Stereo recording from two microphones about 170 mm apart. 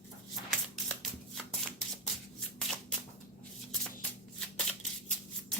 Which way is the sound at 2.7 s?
5° left (ahead or behind).